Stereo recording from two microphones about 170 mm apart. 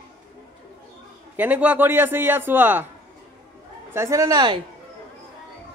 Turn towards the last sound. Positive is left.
turn(degrees=-25)  # may be behind; listen again after turning